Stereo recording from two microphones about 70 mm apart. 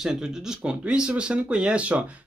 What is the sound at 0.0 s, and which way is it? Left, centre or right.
Speech, centre.